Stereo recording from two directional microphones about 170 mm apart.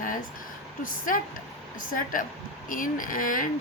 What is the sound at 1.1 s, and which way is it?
A woman's voice, 55° left (ahead or behind).